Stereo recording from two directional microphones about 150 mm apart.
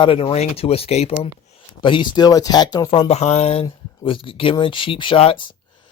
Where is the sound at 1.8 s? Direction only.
30° left (ahead or behind).